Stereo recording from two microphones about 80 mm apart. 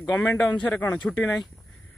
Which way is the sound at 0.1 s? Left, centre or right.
Left.